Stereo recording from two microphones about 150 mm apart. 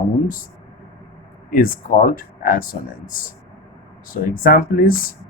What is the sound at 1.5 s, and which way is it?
Speech, 70° left (ahead or behind).